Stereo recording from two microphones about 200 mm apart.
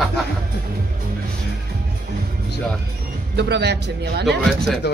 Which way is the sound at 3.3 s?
55° right (ahead or behind).